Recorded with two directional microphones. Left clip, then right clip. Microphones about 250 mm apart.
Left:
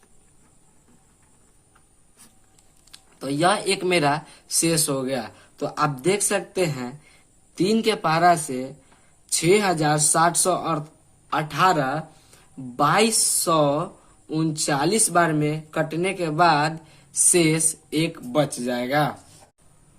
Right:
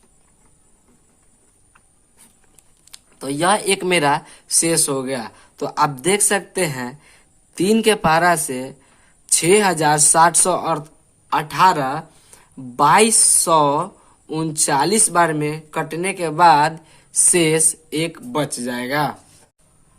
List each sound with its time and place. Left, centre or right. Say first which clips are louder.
2.9 s speech: right 2 dB; right